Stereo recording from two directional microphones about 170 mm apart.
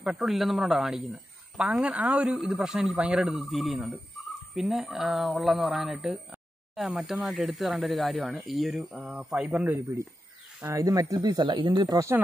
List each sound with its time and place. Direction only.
0.0 s speech: centre (ahead or behind)
9.8 s speech: 20° right (ahead or behind)